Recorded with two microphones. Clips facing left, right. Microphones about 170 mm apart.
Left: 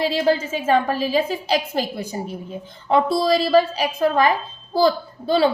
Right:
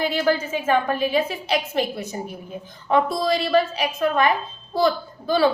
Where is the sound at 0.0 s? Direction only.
30° left (ahead or behind).